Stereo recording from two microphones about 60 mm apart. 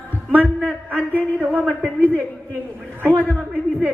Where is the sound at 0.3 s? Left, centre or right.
Right.